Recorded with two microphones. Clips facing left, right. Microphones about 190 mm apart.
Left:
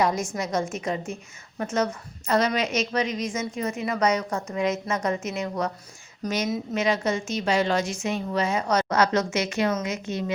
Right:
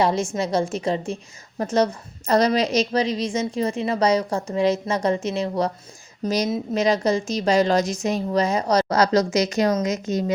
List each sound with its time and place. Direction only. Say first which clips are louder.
0.0 s a woman's voice: right 4 dB; 30° right (ahead or behind)